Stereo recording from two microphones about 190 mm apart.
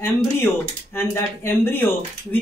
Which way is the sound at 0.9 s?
10° left (ahead or behind).